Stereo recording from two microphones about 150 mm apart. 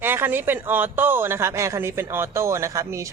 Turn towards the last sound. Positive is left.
turn(degrees=-20)  # may be behind; listen again after turning